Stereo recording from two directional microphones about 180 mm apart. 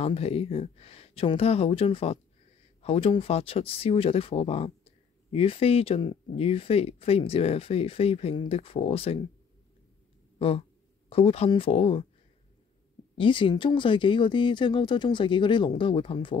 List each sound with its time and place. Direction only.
0.0 s speech: 35° left (ahead or behind)
10.4 s speech: 30° left (ahead or behind)
13.2 s speech: 30° left (ahead or behind)